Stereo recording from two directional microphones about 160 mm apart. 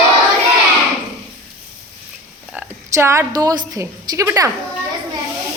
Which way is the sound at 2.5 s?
15° right (ahead or behind).